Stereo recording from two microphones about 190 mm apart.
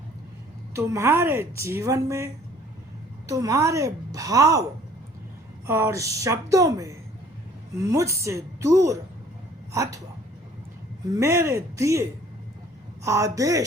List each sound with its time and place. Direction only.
0.7 s a woman's voice: 15° right (ahead or behind)
5.6 s a woman's voice: 15° right (ahead or behind)
11.1 s a woman's voice: 15° right (ahead or behind)
13.1 s a woman's voice: 15° right (ahead or behind)